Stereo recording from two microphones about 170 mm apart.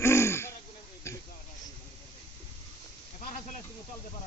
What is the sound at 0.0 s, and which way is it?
Throat clearing, 15° left (ahead or behind).